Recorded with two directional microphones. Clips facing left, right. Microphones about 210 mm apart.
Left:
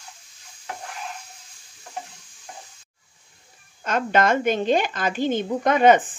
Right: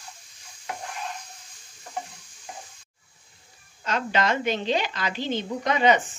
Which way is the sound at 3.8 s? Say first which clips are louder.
Left 5 dB; 50° left (ahead or behind).